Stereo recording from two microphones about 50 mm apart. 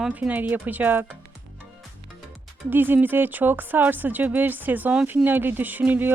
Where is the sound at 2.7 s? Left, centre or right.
Right.